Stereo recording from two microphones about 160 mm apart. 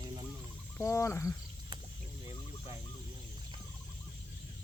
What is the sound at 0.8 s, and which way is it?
Speech, 15° left (ahead or behind).